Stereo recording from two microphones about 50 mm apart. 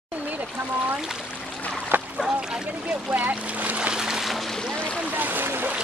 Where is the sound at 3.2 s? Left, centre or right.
Right.